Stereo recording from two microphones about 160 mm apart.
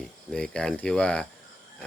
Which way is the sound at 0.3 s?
5° left (ahead or behind).